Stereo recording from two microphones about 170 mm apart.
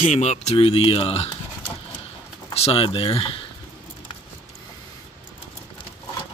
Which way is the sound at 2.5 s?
35° left (ahead or behind).